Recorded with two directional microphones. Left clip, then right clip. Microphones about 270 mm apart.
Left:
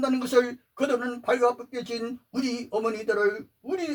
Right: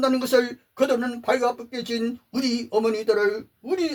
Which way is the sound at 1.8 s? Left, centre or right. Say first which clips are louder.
Right 4 dB; right.